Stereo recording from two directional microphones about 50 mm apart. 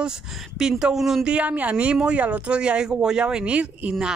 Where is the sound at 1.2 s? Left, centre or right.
Right.